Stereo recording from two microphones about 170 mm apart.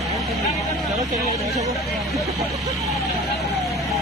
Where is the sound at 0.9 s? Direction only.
20° right (ahead or behind).